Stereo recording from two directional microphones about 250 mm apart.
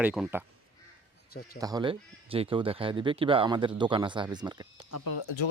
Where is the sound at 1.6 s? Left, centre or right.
Centre.